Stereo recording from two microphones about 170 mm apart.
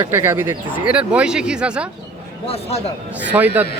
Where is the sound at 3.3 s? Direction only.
10° right (ahead or behind).